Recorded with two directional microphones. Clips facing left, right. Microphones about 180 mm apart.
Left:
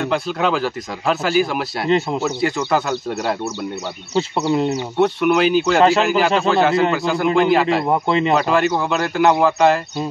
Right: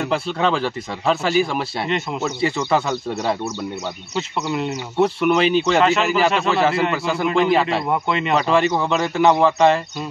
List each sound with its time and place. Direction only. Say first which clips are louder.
0.0 s speech: left 1 dB; centre (ahead or behind)
4.5 s speech: left 6 dB; 45° left (ahead or behind)
4.9 s speech: even; centre (ahead or behind)
7.9 s speech: left 4 dB; 35° left (ahead or behind)
8.3 s speech: right 2 dB; 5° left (ahead or behind)